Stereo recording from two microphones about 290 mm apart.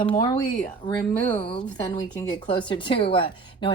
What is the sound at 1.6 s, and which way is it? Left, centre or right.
A woman's voice, centre.